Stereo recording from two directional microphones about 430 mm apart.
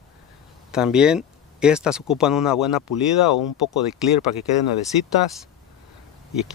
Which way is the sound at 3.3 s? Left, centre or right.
Left.